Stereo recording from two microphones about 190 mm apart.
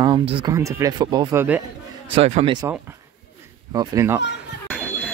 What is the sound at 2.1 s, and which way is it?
Speech, 35° right (ahead or behind).